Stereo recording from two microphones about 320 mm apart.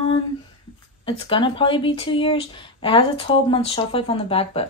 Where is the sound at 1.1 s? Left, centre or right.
Centre.